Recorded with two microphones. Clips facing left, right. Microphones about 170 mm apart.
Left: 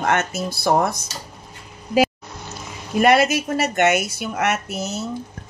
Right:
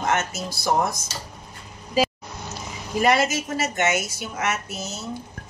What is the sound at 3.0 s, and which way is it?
A woman's voice, 65° left (ahead or behind).